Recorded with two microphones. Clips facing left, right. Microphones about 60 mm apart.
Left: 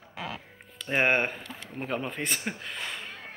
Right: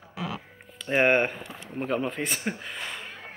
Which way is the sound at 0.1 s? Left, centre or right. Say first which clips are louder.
Right 3 dB; left.